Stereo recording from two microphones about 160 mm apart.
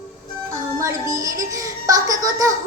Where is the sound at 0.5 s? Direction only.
20° right (ahead or behind).